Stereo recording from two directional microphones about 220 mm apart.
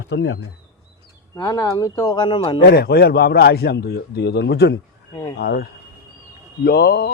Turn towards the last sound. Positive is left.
turn(degrees=50)  # may be behind; listen again after turning